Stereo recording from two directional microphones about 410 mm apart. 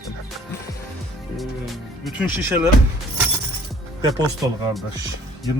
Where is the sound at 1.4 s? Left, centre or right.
Centre.